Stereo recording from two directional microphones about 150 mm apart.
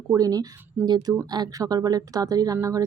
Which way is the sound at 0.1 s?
25° right (ahead or behind).